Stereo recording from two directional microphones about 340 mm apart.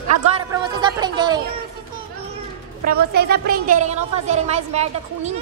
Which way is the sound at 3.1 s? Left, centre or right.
Right.